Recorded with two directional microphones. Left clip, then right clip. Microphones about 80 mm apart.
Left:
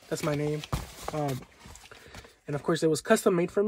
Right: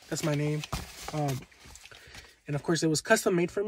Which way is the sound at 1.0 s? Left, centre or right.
Left.